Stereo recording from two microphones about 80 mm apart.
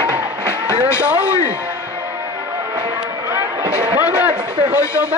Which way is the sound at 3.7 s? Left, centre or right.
Centre.